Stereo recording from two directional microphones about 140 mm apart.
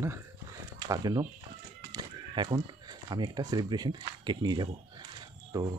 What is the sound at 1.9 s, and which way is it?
Chicken, 30° right (ahead or behind).